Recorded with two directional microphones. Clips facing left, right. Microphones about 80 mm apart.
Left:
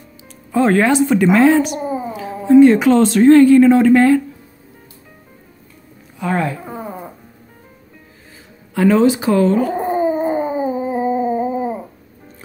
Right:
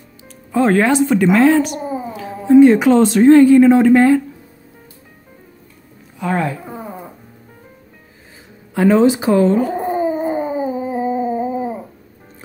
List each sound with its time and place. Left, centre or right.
0.2 s speech: centre
2.4 s speech: centre
6.1 s speech: centre
8.7 s speech: right
9.8 s dog: left